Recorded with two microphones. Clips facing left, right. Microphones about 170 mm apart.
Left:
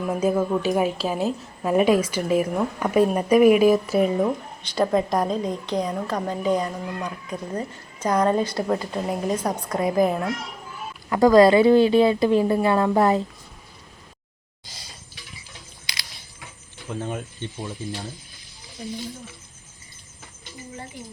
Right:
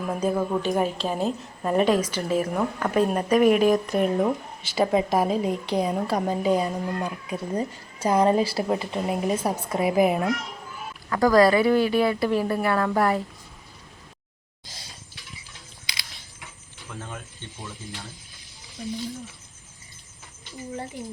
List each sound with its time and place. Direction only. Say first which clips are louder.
0.1 s a woman's voice: left 3 dB; 5° left (ahead or behind)
11.1 s a woman's voice: left 4 dB; 25° left (ahead or behind)
16.9 s a woman's voice: left 8 dB; 20° left (ahead or behind)